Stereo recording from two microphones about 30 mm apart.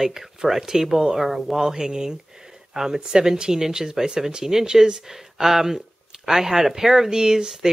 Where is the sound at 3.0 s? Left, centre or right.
Right.